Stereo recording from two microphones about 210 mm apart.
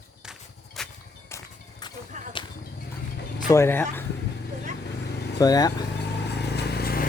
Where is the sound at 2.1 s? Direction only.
35° right (ahead or behind).